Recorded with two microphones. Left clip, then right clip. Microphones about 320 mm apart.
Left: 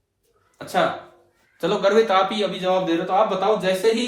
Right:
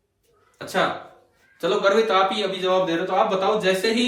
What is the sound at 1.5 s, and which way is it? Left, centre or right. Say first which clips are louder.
A man's voice: left 1 dB; left.